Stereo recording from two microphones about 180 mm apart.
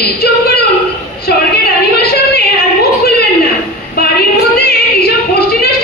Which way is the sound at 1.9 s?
60° left (ahead or behind).